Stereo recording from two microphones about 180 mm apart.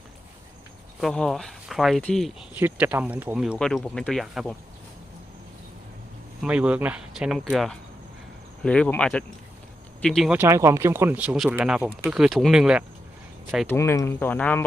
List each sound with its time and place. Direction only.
1.0 s speech: centre (ahead or behind)
2.6 s speech: 10° right (ahead or behind)
3.5 s speech: 5° left (ahead or behind)
6.4 s speech: 5° right (ahead or behind)
10.3 s speech: 15° right (ahead or behind)
13.7 s speech: 15° left (ahead or behind)